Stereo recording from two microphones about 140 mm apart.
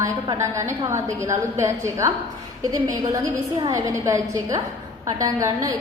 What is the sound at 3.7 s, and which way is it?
A woman's voice, 20° right (ahead or behind).